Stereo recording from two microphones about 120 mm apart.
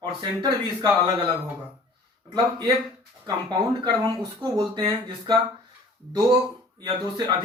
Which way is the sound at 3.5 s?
35° right (ahead or behind).